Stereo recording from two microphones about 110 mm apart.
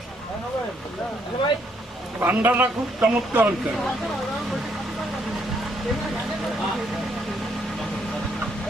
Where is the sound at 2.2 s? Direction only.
15° right (ahead or behind).